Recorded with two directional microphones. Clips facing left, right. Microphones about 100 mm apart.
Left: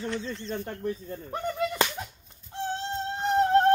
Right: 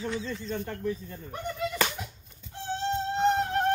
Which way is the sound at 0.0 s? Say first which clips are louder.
Even; centre (ahead or behind).